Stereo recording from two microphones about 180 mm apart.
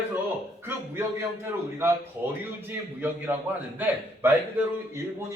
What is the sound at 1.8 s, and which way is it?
A man's voice, 15° right (ahead or behind).